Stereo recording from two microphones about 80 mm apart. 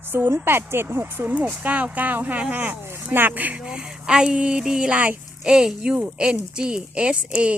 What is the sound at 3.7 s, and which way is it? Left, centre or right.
A woman's voice, centre.